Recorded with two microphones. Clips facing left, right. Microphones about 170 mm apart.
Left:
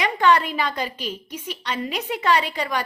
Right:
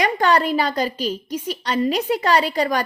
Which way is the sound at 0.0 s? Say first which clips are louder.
Right 1 dB; 40° right (ahead or behind).